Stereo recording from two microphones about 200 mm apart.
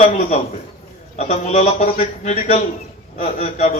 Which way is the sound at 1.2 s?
35° left (ahead or behind).